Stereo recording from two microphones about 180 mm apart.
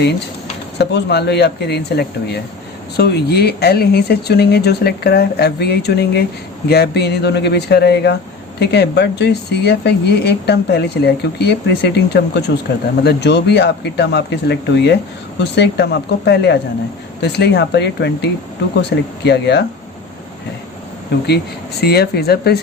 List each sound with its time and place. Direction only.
0.8 s speech: 65° left (ahead or behind)
21.8 s speech: 65° left (ahead or behind)